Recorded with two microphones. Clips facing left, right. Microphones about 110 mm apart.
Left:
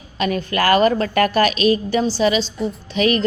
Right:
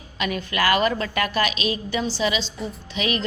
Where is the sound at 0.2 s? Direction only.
40° left (ahead or behind).